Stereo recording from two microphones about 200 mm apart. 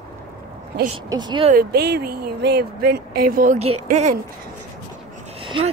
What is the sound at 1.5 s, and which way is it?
Speech, 50° right (ahead or behind).